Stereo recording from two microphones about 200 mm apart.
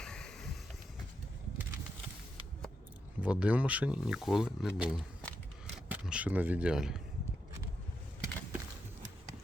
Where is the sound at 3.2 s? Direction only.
5° right (ahead or behind).